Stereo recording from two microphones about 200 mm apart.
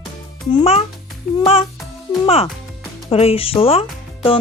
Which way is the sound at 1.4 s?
30° left (ahead or behind).